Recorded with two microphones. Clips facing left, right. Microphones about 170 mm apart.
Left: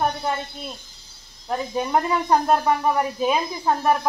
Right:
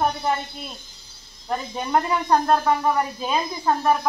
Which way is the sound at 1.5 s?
5° left (ahead or behind).